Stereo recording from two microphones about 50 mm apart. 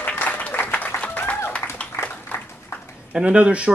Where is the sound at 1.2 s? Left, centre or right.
Left.